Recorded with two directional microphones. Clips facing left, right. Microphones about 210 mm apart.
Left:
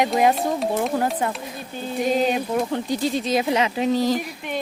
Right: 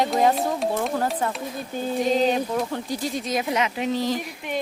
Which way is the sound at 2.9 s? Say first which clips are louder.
Left 5 dB; 30° left (ahead or behind).